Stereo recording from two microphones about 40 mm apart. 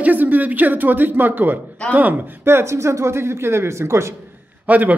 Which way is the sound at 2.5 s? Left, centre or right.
Right.